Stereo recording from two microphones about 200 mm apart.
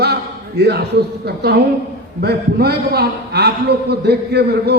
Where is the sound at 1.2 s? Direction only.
55° right (ahead or behind).